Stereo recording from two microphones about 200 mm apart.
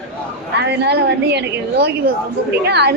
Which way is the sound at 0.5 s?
55° right (ahead or behind).